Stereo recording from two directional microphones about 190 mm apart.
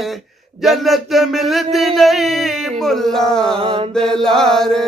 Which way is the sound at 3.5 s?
30° right (ahead or behind).